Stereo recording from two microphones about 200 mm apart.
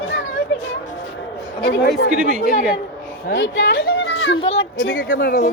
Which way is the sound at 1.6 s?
55° left (ahead or behind).